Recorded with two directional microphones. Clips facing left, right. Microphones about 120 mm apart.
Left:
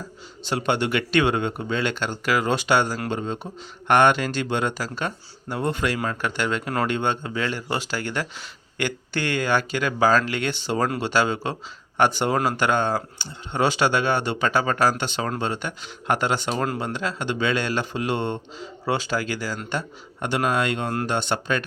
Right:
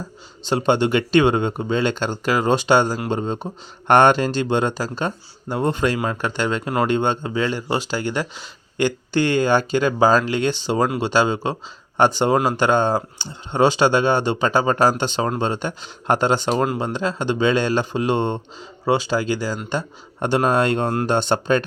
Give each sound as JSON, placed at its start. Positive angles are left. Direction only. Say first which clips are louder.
{"t": 0.4, "sound": "speech", "louder": "right 5 dB", "side_deg": -25}
{"t": 20.1, "sound": "speech", "louder": "right 5 dB", "side_deg": -30}